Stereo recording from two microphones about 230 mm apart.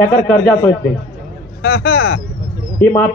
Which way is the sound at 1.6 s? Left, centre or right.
Left.